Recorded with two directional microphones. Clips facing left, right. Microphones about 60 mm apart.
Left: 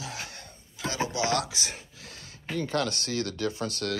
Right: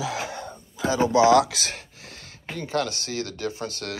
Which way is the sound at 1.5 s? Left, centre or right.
Right.